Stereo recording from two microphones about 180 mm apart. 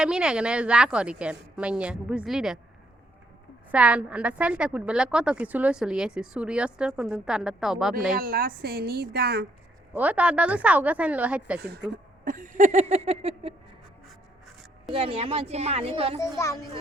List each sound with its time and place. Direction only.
0.0 s a woman's voice: 5° right (ahead or behind)
3.7 s a woman's voice: 5° right (ahead or behind)
8.1 s a woman's voice: 55° right (ahead or behind)
9.9 s a woman's voice: 10° right (ahead or behind)
12.2 s a sound: 50° right (ahead or behind)
14.8 s a sound: 30° right (ahead or behind)
16.2 s speech: 15° left (ahead or behind)